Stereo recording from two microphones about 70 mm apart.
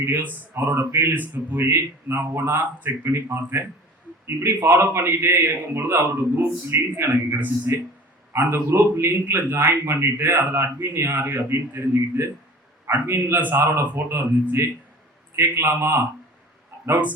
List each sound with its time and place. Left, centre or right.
0.0 s a man's voice: right
1.1 s a man's voice: right
8.3 s a man's voice: right
15.4 s a man's voice: right